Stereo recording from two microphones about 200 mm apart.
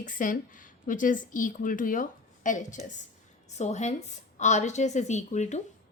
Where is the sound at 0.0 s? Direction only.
40° left (ahead or behind).